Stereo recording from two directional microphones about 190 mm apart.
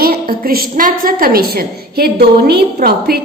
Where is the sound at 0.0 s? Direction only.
50° right (ahead or behind).